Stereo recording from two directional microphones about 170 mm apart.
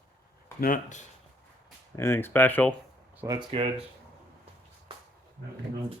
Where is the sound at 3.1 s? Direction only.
10° right (ahead or behind).